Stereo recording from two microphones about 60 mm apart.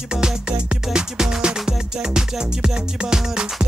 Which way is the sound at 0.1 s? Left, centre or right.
Centre.